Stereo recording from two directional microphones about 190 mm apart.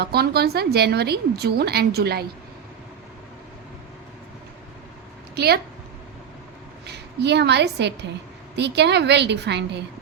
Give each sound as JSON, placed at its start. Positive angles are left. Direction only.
{"t": 0.0, "sound": "a woman's voice", "side_deg": -55}
{"t": 6.8, "sound": "a woman's voice", "side_deg": -60}